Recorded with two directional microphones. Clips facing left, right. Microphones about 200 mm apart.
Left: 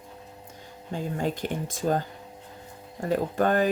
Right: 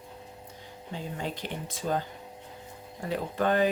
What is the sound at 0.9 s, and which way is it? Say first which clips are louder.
Speech: left 6 dB; 45° left (ahead or behind).